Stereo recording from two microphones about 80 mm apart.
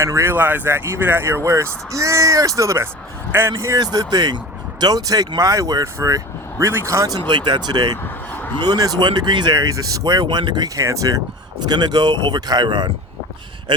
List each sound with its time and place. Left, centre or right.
0.0 s speech: right
3.9 s speech: right
7.3 s speech: right
10.2 s speech: right
10.8 s speech: right
11.6 s speech: right